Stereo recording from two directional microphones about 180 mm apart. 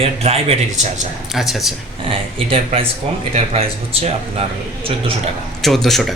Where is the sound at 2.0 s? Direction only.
30° right (ahead or behind).